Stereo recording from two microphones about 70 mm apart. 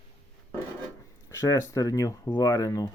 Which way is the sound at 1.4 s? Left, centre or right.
Left.